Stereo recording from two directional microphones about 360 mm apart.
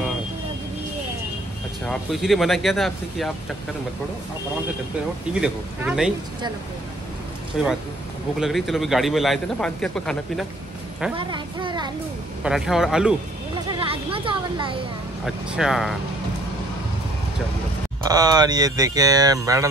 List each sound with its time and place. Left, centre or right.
1.9 s a man's voice: centre
5.3 s a man's voice: centre
7.6 s a man's voice: centre
11.1 s speech: centre
12.4 s a man's voice: centre
13.7 s music: centre
15.2 s a man's voice: centre
18.1 s speech: centre